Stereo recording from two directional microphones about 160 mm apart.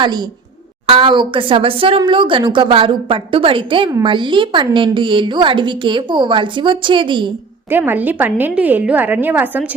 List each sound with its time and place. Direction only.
0.0 s a woman's voice: 25° right (ahead or behind)
7.7 s a woman's voice: 10° right (ahead or behind)